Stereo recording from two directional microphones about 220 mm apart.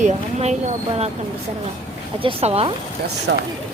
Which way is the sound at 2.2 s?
25° right (ahead or behind).